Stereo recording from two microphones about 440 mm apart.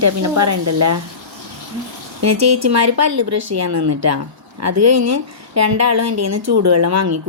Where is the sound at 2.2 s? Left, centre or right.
Right.